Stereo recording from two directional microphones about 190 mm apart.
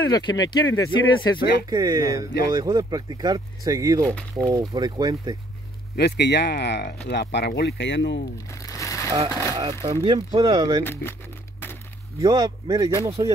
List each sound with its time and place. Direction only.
0.1 s speech: 20° left (ahead or behind)
1.7 s speech: 20° right (ahead or behind)
5.9 s speech: 60° left (ahead or behind)
8.6 s a sound: 15° left (ahead or behind)
9.5 s speech: 20° right (ahead or behind)
10.8 s speech: 10° left (ahead or behind)
12.2 s speech: 20° right (ahead or behind)